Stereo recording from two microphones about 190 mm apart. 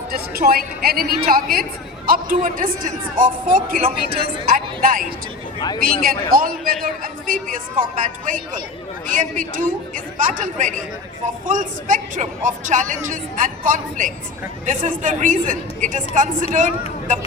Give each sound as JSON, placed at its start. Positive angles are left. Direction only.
{"t": 0.1, "sound": "a man's voice", "side_deg": -55}
{"t": 5.5, "sound": "speech", "side_deg": 20}
{"t": 5.8, "sound": "a man's voice", "side_deg": -50}